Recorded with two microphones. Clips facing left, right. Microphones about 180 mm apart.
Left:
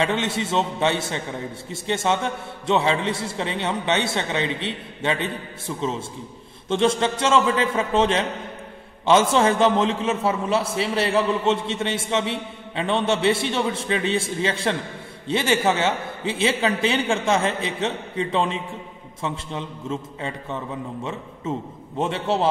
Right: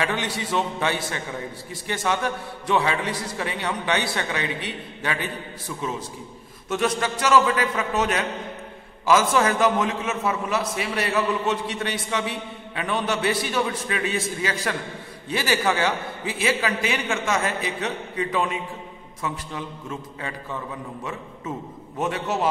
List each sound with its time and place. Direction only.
0.0 s a man's voice: 25° left (ahead or behind)